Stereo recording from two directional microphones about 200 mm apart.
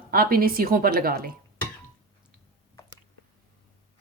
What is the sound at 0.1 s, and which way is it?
A woman's voice, 45° right (ahead or behind).